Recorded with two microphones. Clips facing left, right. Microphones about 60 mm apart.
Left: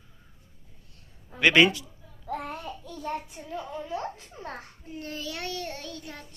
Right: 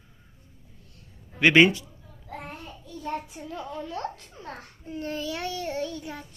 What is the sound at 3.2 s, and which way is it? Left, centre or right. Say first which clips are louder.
Speech: even; centre.